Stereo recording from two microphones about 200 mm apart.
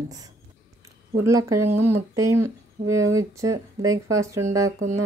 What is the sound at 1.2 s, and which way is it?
Speech, 15° right (ahead or behind).